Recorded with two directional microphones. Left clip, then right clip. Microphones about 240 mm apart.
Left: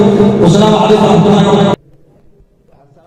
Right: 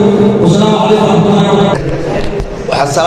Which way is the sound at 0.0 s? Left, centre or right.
Centre.